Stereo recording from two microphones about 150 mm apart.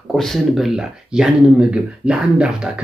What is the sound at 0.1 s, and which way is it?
Speech, centre (ahead or behind).